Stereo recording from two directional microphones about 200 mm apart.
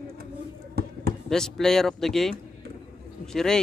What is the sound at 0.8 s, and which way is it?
Basketball bounce, 50° right (ahead or behind).